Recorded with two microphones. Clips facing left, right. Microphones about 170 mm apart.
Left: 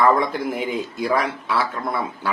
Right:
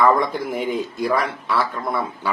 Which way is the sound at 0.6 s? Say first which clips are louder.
Right 2 dB; 50° right (ahead or behind).